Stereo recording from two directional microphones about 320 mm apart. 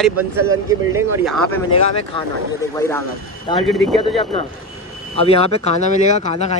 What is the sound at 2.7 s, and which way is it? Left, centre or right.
Speech, centre.